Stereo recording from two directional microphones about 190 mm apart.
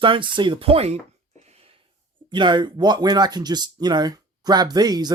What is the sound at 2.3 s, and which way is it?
Speech, 25° right (ahead or behind).